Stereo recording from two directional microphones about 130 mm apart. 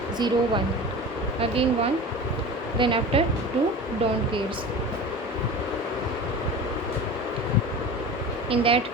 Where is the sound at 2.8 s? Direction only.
40° right (ahead or behind).